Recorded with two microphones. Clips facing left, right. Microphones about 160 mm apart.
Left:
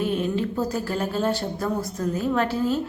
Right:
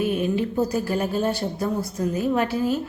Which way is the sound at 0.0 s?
10° right (ahead or behind).